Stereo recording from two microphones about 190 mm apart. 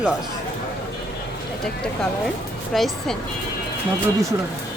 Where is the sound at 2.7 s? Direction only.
Centre (ahead or behind).